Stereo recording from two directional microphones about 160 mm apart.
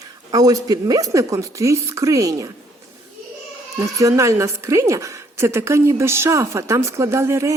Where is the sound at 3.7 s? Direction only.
20° right (ahead or behind).